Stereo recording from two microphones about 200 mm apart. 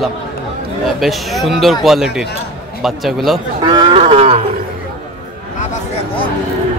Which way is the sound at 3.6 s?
20° right (ahead or behind).